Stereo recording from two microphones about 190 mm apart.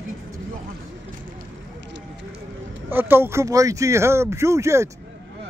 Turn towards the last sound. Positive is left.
turn(degrees=-15)  # may be behind; listen again after turning